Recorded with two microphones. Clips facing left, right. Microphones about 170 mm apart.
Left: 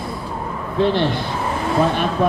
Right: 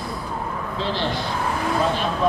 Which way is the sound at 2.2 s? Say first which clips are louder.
Left 2 dB; 55° left (ahead or behind).